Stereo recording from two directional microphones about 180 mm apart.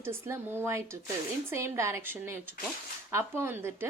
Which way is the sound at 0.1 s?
15° right (ahead or behind).